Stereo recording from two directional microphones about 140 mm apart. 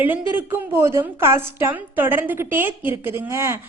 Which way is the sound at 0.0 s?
15° right (ahead or behind).